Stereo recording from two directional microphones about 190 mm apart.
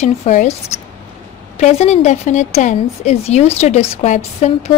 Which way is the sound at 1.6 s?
35° left (ahead or behind).